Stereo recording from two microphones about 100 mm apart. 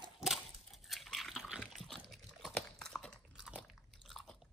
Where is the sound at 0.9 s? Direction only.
Centre (ahead or behind).